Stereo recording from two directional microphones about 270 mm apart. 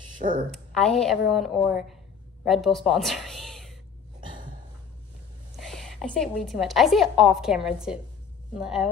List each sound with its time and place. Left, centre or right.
0.2 s a woman's voice: right
0.5 s a woman's voice: centre
2.4 s a sound: centre
5.6 s a woman's voice: centre